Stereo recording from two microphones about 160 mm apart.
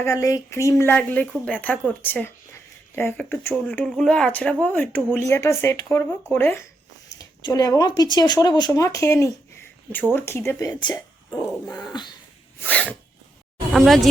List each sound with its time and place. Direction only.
0.0 s speech: 20° left (ahead or behind)
7.2 s speech: 25° left (ahead or behind)
11.4 s speech: 5° left (ahead or behind)
12.5 s sneeze: 10° left (ahead or behind)
13.7 s speech: centre (ahead or behind)